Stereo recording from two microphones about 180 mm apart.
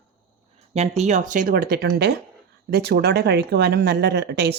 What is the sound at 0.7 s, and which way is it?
Speech, 40° right (ahead or behind).